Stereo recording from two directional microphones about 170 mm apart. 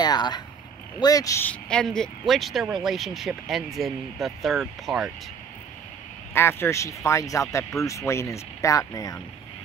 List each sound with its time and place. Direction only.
0.0 s a sound: 25° left (ahead or behind)
0.9 s speech: 20° left (ahead or behind); by 5.1 s centre (ahead or behind)
6.3 s speech: 15° left (ahead or behind)